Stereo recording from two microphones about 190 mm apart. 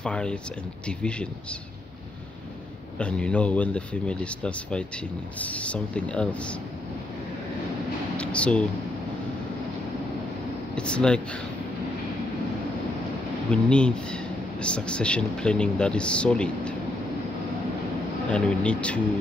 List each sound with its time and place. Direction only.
0.0 s speech: 5° left (ahead or behind)
3.0 s speech: 5° left (ahead or behind)
8.2 s speech: 5° left (ahead or behind)
10.8 s speech: 5° left (ahead or behind)
13.5 s speech: 5° left (ahead or behind)
18.3 s speech: 5° left (ahead or behind)